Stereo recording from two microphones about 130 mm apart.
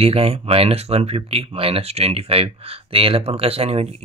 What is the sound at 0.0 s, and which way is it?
Speech, 50° right (ahead or behind).